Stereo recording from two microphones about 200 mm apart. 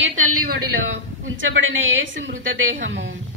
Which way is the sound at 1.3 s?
75° right (ahead or behind).